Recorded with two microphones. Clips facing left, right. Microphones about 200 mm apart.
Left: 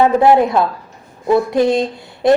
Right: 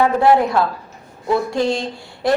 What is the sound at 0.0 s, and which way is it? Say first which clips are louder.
Speech: left 3 dB; 20° left (ahead or behind).